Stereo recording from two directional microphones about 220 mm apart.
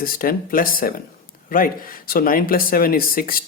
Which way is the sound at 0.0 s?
40° left (ahead or behind).